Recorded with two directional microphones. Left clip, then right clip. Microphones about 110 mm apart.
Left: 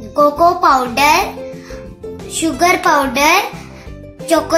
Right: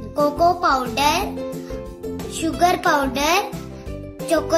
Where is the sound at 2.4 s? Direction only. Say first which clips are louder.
Left 5 dB; 20° left (ahead or behind).